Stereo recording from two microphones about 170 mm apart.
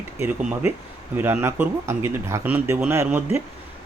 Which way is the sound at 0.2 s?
15° right (ahead or behind).